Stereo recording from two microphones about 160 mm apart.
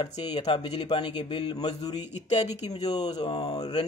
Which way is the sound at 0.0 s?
25° left (ahead or behind).